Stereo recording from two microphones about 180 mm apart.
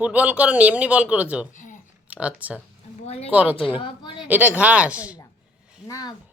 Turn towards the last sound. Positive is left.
turn(degrees=20)  # may be behind; listen again after turning